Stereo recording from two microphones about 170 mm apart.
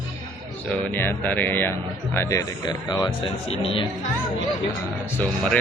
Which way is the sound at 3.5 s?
35° left (ahead or behind).